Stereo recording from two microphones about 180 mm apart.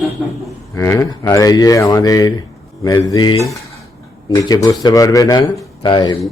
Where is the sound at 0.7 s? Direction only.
15° left (ahead or behind).